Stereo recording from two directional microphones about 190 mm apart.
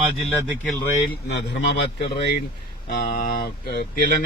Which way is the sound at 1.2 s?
65° left (ahead or behind).